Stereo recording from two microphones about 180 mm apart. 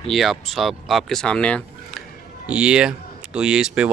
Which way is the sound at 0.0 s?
Centre (ahead or behind).